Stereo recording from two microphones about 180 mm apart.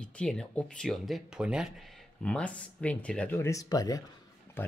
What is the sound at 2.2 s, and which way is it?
Speech, 5° left (ahead or behind).